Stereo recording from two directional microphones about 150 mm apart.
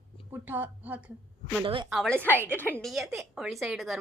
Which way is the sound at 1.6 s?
35° right (ahead or behind).